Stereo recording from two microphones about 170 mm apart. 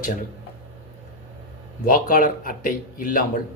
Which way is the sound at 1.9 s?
55° left (ahead or behind).